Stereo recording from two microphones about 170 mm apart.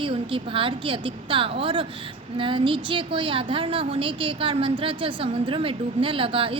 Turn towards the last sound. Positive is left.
turn(degrees=-30)  # may be behind; listen again after turning